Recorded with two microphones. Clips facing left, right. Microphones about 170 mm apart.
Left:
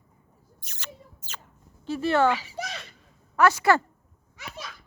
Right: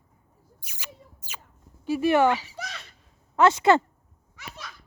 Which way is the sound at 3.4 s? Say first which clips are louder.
Right 2 dB; 25° right (ahead or behind).